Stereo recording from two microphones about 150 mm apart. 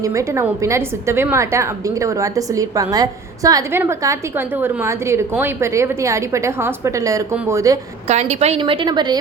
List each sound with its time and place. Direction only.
0.0 s a woman's voice: 20° right (ahead or behind)
8.0 s a woman's voice: 50° right (ahead or behind); by 9.1 s 30° right (ahead or behind)